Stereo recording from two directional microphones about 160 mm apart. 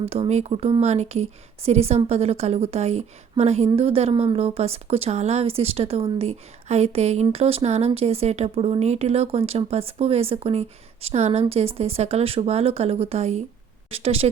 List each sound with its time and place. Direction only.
0.1 s speech: 40° right (ahead or behind)